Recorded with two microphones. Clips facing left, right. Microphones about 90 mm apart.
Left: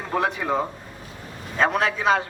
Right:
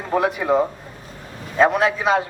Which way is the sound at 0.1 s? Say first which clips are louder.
Right 5 dB; 15° right (ahead or behind).